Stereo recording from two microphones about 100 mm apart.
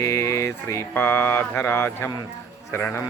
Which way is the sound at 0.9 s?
20° left (ahead or behind).